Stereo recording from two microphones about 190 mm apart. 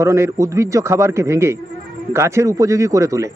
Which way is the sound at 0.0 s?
15° right (ahead or behind).